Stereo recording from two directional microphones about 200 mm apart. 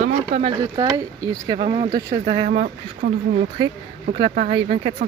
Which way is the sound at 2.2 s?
45° right (ahead or behind).